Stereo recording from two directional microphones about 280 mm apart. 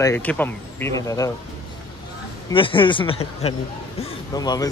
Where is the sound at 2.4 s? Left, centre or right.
Centre.